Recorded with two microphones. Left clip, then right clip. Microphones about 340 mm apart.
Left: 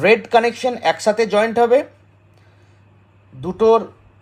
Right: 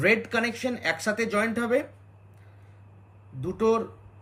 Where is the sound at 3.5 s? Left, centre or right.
Centre.